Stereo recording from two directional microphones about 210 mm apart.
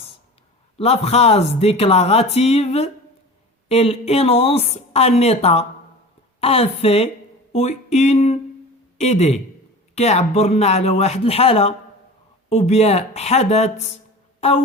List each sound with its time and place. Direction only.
0.8 s speech: 30° left (ahead or behind)